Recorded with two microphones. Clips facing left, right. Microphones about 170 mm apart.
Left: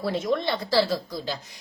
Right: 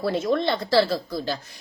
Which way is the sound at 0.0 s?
15° left (ahead or behind).